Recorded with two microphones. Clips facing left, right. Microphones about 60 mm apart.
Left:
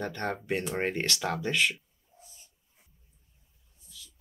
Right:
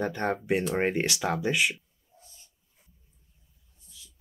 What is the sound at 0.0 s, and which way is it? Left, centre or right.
Speech, centre.